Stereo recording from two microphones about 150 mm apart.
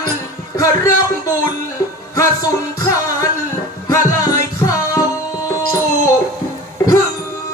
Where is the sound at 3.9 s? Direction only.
20° left (ahead or behind).